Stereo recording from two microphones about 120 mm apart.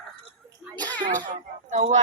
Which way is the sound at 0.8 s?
15° left (ahead or behind).